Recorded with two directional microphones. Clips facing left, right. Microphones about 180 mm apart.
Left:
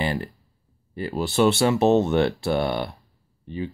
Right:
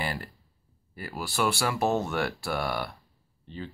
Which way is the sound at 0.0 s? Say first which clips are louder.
Left 7 dB; 20° left (ahead or behind).